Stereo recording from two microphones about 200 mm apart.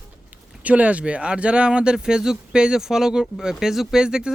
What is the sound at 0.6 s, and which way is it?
Speech, 5° right (ahead or behind).